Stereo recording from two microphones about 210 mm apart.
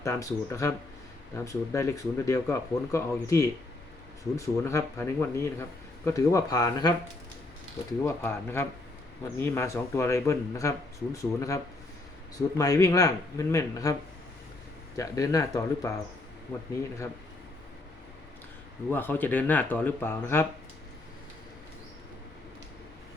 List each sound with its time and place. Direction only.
0.0 s speech: 15° left (ahead or behind)
8.0 s speech: 10° left (ahead or behind)
14.9 s speech: 15° left (ahead or behind)
18.9 s speech: 10° left (ahead or behind)